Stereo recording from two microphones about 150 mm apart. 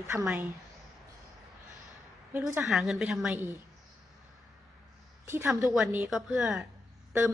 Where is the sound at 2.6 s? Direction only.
Centre (ahead or behind).